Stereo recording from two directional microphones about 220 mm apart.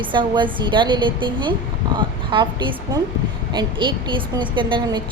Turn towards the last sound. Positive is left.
turn(degrees=-20)  # may be behind; listen again after turning